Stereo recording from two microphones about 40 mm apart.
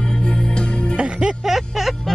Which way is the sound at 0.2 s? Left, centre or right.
Left.